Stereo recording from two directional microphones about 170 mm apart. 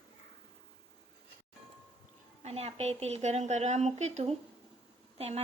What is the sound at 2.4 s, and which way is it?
A woman's voice, 40° right (ahead or behind).